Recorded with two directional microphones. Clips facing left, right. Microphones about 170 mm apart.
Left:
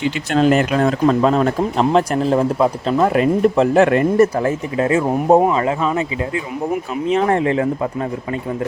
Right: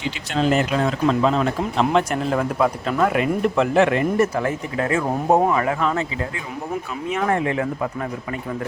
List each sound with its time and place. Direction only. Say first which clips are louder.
0.3 s speech: left 4 dB; 55° left (ahead or behind); by 4.5 s 35° left (ahead or behind)
4.8 s speech: left 5 dB; 25° left (ahead or behind)
7.1 s speech: left 5 dB; 30° left (ahead or behind)